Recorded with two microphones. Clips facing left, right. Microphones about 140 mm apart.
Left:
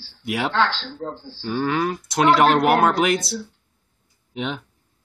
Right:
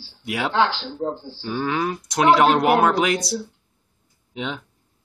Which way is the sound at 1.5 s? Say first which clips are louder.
Left 2 dB; 5° left (ahead or behind).